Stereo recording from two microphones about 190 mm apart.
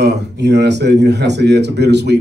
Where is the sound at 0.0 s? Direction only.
65° right (ahead or behind).